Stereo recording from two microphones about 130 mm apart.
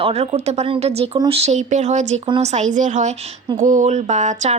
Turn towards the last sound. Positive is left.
turn(degrees=-65)  # may be behind; listen again after turning